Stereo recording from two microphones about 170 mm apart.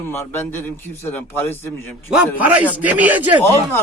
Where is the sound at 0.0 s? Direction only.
10° left (ahead or behind).